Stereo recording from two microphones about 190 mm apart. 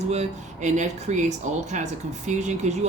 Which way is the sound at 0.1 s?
35° right (ahead or behind).